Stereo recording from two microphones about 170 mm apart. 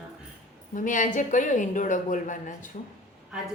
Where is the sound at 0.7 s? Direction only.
50° left (ahead or behind).